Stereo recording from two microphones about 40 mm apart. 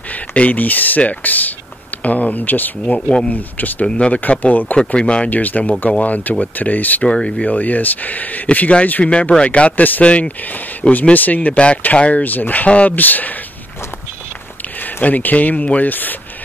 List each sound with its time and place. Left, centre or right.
0.3 s speech: left
4.7 s speech: left
5.3 s speech: left
7.1 s speech: left
7.4 s speech: left
10.0 s speech: left
11.1 s speech: left
11.5 s speech: left
15.0 s speech: left
15.8 s speech: left